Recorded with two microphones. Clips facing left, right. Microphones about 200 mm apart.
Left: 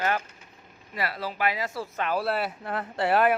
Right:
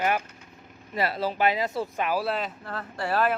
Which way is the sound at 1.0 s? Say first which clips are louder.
Right 4 dB; 25° right (ahead or behind).